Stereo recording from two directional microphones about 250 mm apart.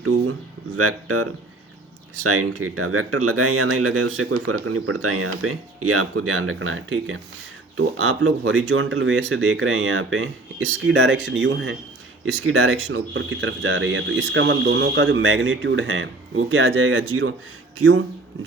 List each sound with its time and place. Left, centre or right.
0.8 s speech: right